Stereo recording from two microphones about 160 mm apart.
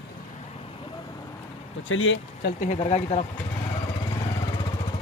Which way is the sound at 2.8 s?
40° left (ahead or behind).